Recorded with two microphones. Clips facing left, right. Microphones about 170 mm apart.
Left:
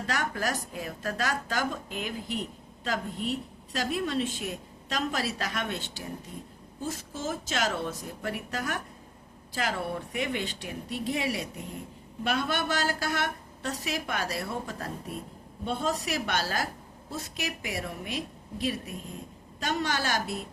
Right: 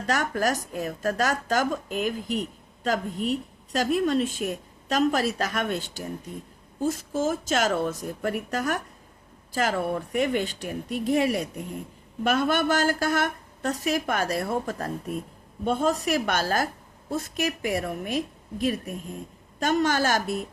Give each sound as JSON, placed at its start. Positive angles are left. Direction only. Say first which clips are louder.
{"t": 0.1, "sound": "a woman's voice", "louder": "right 6 dB", "side_deg": -45}